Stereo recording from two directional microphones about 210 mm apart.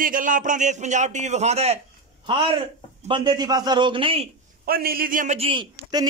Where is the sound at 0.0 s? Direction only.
40° right (ahead or behind).